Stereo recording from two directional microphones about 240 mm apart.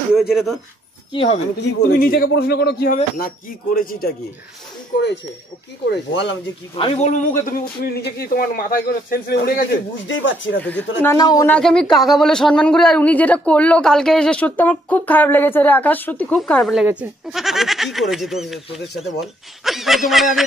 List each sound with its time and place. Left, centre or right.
0.1 s speech: centre
1.1 s speech: left
1.6 s a man's voice: left
5.9 s speech: left
6.8 s a man's voice: left
10.0 s speech: left
10.6 s speech: centre
11.5 s speech: centre